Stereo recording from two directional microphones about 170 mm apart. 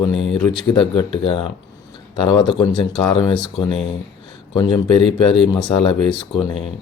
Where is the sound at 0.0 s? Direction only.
30° left (ahead or behind).